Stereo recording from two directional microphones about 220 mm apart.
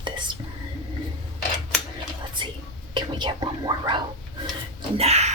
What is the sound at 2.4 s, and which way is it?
Whispering, 20° right (ahead or behind).